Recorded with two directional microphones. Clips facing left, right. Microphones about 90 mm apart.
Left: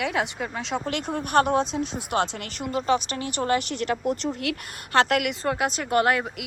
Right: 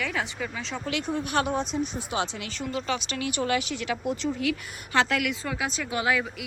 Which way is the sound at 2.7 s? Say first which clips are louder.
Left 7 dB; 40° left (ahead or behind).